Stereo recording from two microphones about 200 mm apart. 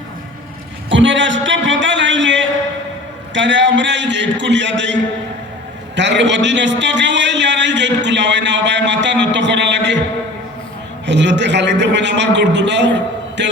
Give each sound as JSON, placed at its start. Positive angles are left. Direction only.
{"t": 0.9, "sound": "a man's voice", "side_deg": -65}
{"t": 6.0, "sound": "a man's voice", "side_deg": -60}
{"t": 11.0, "sound": "a man's voice", "side_deg": -60}